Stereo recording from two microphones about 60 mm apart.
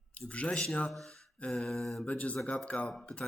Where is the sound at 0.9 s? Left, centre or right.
Centre.